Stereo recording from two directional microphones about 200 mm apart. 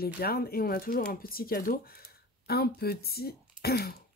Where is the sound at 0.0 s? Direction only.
50° left (ahead or behind).